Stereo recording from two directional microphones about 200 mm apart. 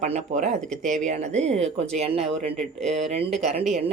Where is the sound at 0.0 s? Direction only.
35° right (ahead or behind).